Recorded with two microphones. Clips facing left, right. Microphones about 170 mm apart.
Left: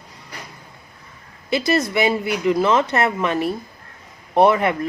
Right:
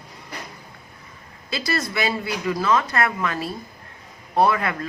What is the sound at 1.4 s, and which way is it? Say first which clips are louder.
Speech: left 7 dB; 20° left (ahead or behind).